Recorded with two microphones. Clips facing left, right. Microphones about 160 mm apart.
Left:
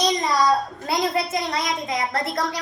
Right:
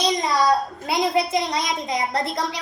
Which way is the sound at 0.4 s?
25° right (ahead or behind).